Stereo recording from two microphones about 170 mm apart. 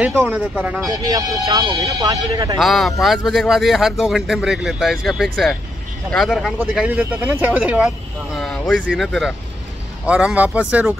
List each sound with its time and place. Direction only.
0.0 s speech: 10° right (ahead or behind)
0.8 s speech: 20° right (ahead or behind)
2.6 s speech: centre (ahead or behind)